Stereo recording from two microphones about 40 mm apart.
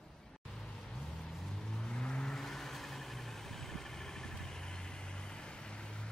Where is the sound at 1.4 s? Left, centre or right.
Centre.